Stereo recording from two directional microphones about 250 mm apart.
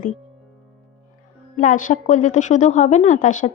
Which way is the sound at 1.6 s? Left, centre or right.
Left.